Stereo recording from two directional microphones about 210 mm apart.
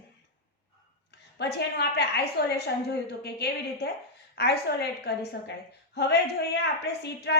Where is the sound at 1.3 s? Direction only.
50° left (ahead or behind).